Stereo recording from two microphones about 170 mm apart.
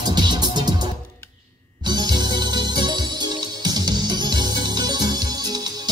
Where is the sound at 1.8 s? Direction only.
25° right (ahead or behind).